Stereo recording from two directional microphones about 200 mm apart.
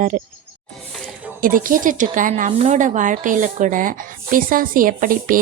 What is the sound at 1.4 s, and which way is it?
A woman's voice, 45° right (ahead or behind).